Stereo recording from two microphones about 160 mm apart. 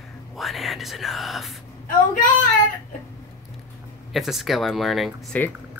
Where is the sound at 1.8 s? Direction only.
55° left (ahead or behind).